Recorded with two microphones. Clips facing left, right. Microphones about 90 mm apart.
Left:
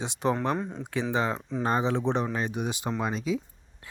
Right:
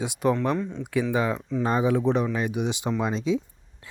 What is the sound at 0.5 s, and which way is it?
Speech, 35° left (ahead or behind).